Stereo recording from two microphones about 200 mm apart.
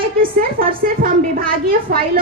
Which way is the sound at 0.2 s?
45° right (ahead or behind).